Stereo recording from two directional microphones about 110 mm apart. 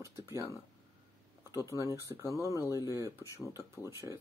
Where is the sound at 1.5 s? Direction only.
25° right (ahead or behind).